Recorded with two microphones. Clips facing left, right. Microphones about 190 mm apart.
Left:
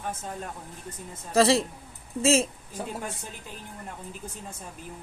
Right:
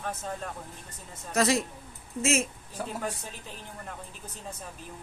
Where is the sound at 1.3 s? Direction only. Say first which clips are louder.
Left 5 dB; 30° left (ahead or behind).